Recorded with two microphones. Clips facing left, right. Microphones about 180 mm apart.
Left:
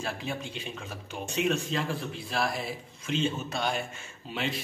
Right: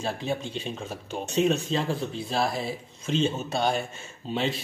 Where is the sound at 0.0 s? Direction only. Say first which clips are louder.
Right 5 dB; 30° right (ahead or behind).